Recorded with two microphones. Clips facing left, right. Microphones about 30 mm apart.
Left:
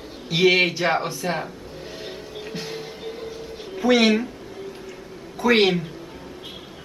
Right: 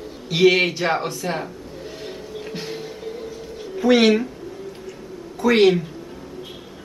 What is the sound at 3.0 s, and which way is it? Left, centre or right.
Vehicle, left.